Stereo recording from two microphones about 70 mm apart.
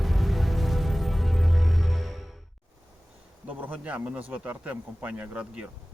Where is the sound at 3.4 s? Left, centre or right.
Right.